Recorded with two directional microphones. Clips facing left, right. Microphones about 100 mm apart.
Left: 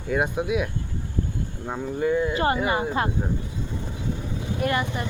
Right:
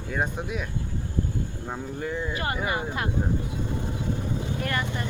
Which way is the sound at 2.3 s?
30° left (ahead or behind).